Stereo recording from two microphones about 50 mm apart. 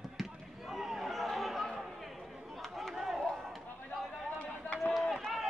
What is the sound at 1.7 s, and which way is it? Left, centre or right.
Chatter, centre.